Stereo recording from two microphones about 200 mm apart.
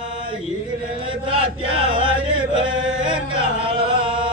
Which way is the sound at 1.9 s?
25° right (ahead or behind).